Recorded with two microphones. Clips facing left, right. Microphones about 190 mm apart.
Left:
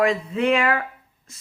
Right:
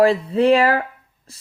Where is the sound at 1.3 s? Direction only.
35° right (ahead or behind).